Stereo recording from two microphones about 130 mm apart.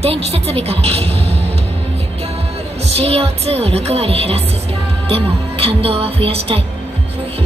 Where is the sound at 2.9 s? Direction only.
50° right (ahead or behind).